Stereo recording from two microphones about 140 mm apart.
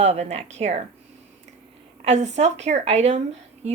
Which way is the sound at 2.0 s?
55° right (ahead or behind).